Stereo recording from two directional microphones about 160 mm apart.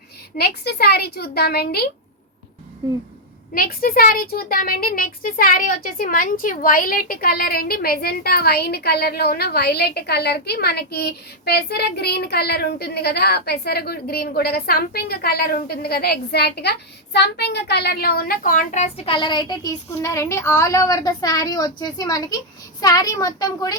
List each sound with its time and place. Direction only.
0.3 s a woman's voice: 85° left
2.8 s a sound: 20° right (ahead or behind)
3.5 s speech: 65° left (ahead or behind); by 23.7 s 25° left (ahead or behind)